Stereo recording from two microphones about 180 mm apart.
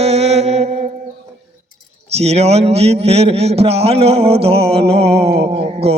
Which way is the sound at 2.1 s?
35° right (ahead or behind).